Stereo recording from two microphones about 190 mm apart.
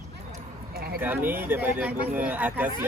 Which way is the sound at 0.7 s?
55° right (ahead or behind).